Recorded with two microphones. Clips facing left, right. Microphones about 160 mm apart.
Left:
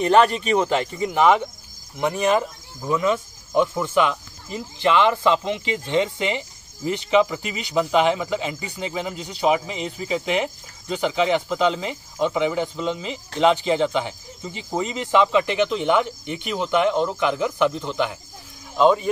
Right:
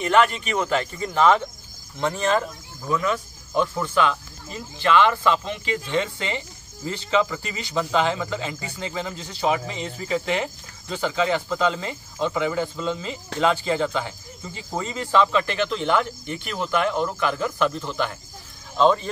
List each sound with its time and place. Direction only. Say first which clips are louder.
0.0 s speech: left 3 dB; 35° left (ahead or behind); by 19.0 s 10° left (ahead or behind)